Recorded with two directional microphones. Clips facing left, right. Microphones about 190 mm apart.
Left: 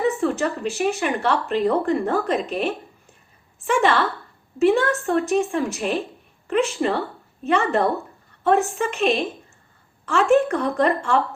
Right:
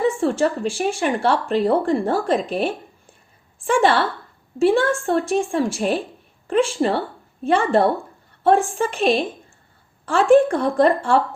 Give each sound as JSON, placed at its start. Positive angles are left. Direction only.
{"t": 0.0, "sound": "a woman's voice", "side_deg": -30}